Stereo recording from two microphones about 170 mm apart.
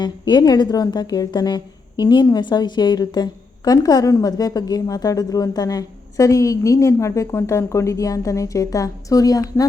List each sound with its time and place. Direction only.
0.0 s a woman's voice: 25° left (ahead or behind)